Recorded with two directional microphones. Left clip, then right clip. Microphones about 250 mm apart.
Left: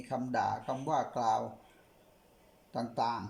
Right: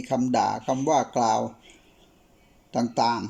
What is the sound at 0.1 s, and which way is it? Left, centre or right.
Speech, centre.